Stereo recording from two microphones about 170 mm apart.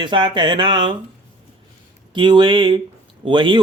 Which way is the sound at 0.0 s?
30° right (ahead or behind).